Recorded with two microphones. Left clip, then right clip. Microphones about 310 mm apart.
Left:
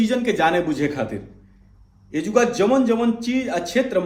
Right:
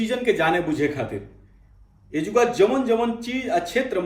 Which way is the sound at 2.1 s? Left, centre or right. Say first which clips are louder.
Left 1 dB; centre.